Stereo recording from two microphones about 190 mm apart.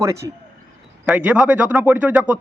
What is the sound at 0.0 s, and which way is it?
Speech, 15° right (ahead or behind).